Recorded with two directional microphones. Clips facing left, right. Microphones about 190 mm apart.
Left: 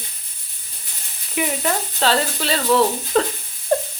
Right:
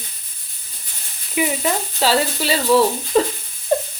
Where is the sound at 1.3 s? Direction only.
5° right (ahead or behind).